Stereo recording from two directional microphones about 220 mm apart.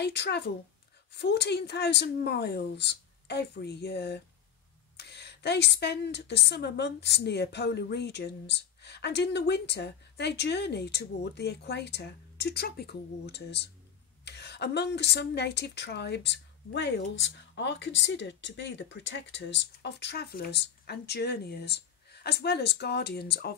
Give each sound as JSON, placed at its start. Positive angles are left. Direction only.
{"t": 0.0, "sound": "a woman's voice", "side_deg": 50}